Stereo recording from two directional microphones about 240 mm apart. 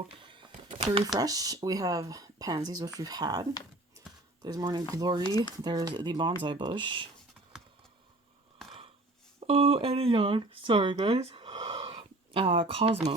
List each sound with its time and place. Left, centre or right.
0.3 s a sound: centre
1.0 s speech: centre
4.4 s speech: centre
5.2 s speech: centre
5.6 s speech: centre
9.4 s speech: right